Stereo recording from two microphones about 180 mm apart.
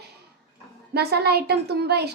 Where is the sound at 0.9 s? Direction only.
65° right (ahead or behind).